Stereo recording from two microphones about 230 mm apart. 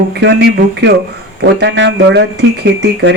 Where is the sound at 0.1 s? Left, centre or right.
Right.